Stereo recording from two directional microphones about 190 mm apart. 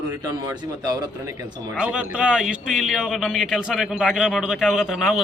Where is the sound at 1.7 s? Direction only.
5° right (ahead or behind).